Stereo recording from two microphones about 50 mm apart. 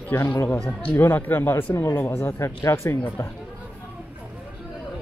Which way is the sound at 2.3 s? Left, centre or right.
Left.